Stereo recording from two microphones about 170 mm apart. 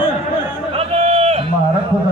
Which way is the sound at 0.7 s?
40° right (ahead or behind).